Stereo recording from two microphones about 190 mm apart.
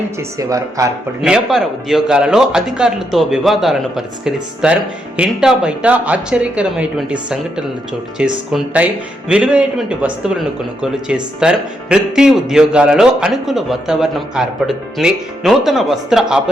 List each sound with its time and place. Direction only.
0.2 s speech: 15° right (ahead or behind)
1.2 s a man's voice: centre (ahead or behind)